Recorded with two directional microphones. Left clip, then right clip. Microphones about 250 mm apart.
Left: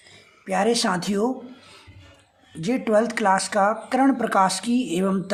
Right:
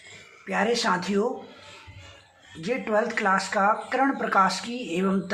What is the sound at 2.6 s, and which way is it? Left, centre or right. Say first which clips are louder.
Speech: left 4 dB; left.